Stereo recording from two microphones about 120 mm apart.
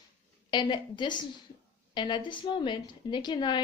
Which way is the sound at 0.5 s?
40° left (ahead or behind).